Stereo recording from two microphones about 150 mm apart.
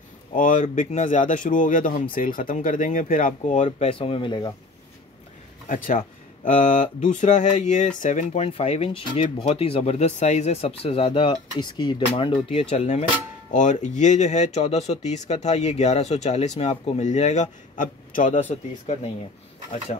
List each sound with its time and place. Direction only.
0.3 s speech: 60° left (ahead or behind)
3.6 s speech: 40° left (ahead or behind)
5.7 s speech: 60° left (ahead or behind); by 12.5 s 35° left (ahead or behind)
12.5 s speech: 50° left (ahead or behind)
18.4 s speech: 45° left (ahead or behind)